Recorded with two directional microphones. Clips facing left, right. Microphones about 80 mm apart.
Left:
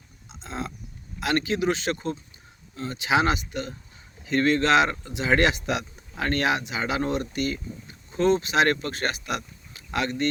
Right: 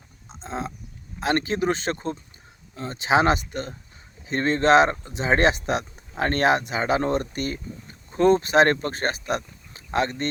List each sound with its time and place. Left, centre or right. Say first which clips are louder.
0.3 s livestock: right 3 dB; right
1.2 s speech: right 1 dB; right